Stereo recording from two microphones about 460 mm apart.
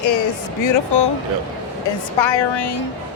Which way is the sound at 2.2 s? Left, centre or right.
Left.